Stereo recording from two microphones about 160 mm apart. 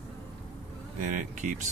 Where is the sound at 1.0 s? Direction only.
55° right (ahead or behind).